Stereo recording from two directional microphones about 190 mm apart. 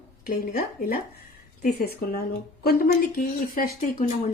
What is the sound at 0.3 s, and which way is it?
Speech, 50° left (ahead or behind).